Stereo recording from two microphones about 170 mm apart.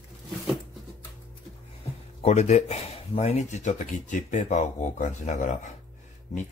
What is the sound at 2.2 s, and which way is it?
Speech, 40° left (ahead or behind).